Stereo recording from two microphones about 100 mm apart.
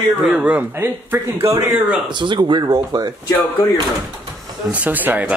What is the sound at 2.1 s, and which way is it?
Speech, 50° right (ahead or behind).